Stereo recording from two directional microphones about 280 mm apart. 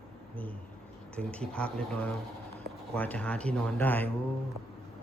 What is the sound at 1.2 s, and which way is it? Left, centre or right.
Speech, centre.